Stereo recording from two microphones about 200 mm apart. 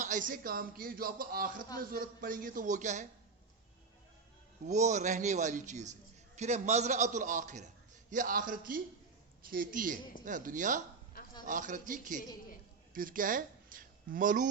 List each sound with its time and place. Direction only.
0.0 s a man's voice: 40° right (ahead or behind)
4.6 s a man's voice: 35° right (ahead or behind)